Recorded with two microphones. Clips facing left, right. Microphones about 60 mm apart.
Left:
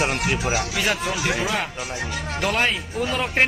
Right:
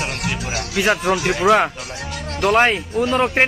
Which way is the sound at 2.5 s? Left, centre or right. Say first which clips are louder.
Right 9 dB; right.